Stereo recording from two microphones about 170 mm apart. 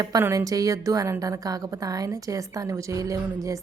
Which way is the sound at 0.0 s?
20° right (ahead or behind).